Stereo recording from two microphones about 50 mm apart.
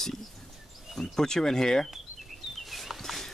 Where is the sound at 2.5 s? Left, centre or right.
Centre.